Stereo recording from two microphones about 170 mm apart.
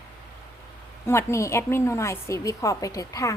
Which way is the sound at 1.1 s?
15° left (ahead or behind).